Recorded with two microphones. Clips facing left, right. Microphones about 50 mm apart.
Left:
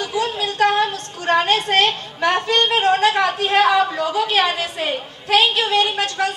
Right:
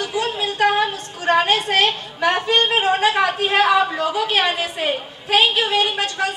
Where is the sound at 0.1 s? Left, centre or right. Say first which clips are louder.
Left 1 dB; centre.